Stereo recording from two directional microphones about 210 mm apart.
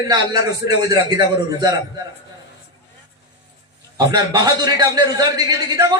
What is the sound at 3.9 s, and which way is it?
A man's voice, 20° right (ahead or behind).